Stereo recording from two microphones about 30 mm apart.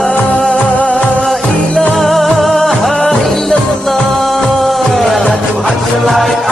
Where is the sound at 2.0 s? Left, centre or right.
Centre.